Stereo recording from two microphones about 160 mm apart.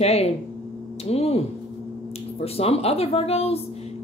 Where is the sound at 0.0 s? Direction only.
40° left (ahead or behind).